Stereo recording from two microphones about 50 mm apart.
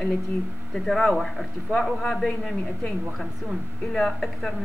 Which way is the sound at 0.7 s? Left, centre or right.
Centre.